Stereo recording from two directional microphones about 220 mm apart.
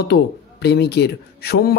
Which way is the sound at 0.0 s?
50° left (ahead or behind).